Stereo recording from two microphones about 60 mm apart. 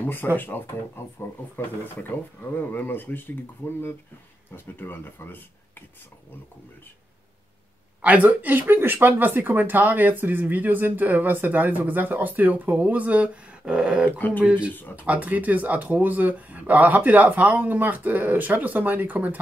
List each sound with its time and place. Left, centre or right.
0.0 s speech: left
8.0 s speech: right
14.1 s speech: left
15.0 s speech: right